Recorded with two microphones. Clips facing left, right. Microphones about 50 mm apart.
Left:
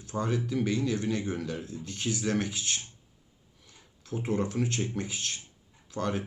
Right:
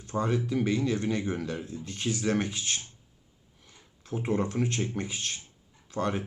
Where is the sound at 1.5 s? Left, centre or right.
Centre.